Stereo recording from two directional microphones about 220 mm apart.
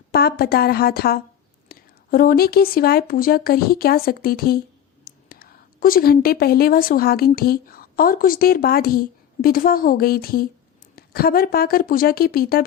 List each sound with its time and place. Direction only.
0.1 s a woman's voice: 45° left (ahead or behind)